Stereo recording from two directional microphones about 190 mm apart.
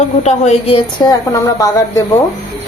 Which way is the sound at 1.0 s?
20° left (ahead or behind).